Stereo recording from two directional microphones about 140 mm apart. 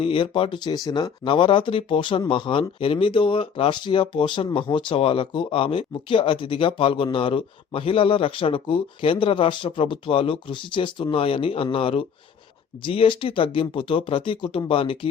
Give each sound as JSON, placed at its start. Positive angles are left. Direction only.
{"t": 0.0, "sound": "speech", "side_deg": 35}